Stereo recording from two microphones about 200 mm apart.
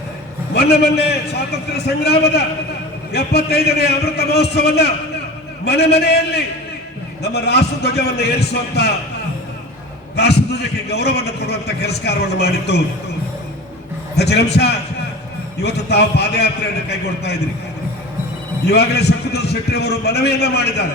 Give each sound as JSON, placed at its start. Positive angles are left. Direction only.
{"t": 0.5, "sound": "a man's voice", "side_deg": 55}
{"t": 10.2, "sound": "a man's voice", "side_deg": 55}
{"t": 14.2, "sound": "a man's voice", "side_deg": 55}
{"t": 18.6, "sound": "a man's voice", "side_deg": 55}